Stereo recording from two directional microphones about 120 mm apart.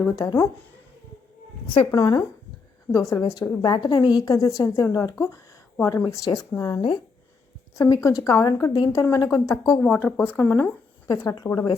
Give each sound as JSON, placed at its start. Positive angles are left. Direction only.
{"t": 0.2, "sound": "a woman's voice", "side_deg": 30}
{"t": 1.9, "sound": "a woman's voice", "side_deg": 30}
{"t": 9.7, "sound": "speech", "side_deg": 10}
{"t": 11.1, "sound": "a woman's voice", "side_deg": 30}